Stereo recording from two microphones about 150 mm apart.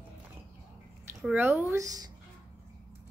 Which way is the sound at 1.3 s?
15° right (ahead or behind).